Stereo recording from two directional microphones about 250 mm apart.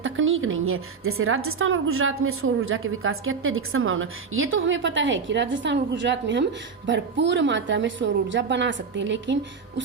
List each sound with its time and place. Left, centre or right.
0.0 s a woman's voice: right